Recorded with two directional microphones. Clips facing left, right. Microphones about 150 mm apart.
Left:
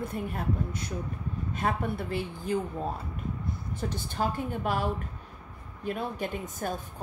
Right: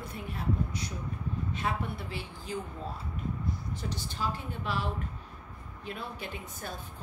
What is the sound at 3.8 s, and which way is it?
A woman's voice, 50° left (ahead or behind).